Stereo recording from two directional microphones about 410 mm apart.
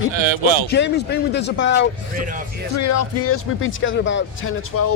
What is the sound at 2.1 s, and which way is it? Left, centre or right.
Speech, centre.